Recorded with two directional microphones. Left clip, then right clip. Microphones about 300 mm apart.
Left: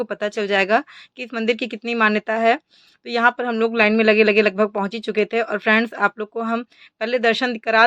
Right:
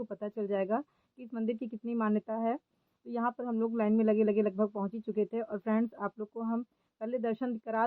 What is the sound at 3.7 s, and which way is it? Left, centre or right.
Speech, centre.